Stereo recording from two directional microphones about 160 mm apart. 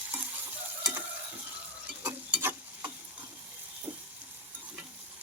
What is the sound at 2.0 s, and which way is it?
Stir, 10° right (ahead or behind).